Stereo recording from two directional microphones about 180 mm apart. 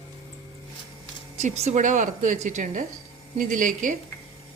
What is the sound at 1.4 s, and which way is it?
A woman's voice, 40° right (ahead or behind).